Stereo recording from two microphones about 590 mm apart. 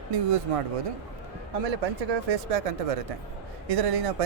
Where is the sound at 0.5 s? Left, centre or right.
Right.